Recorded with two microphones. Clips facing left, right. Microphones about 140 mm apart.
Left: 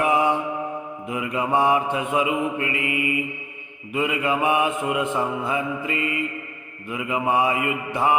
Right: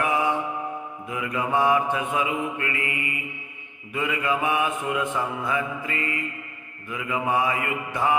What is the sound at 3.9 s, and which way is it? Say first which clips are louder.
Mantra: left 3 dB; 20° left (ahead or behind).